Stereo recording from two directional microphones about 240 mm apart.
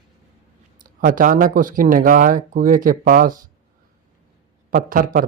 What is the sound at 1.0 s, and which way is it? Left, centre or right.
Speech, right.